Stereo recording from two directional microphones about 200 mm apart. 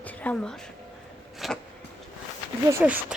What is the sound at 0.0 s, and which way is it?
Speech, 5° left (ahead or behind).